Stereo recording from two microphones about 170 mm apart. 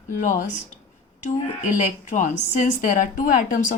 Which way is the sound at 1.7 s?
45° left (ahead or behind).